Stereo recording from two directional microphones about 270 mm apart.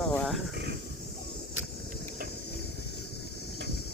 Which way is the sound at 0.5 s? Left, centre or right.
Right.